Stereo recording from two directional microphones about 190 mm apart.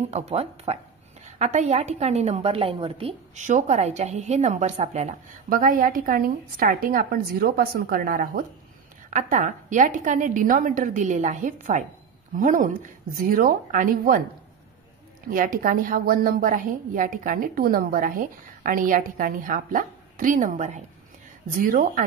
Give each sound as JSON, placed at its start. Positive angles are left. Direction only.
{"t": 0.1, "sound": "a woman's voice", "side_deg": -35}
{"t": 5.6, "sound": "a woman's voice", "side_deg": -45}
{"t": 15.3, "sound": "a woman's voice", "side_deg": -45}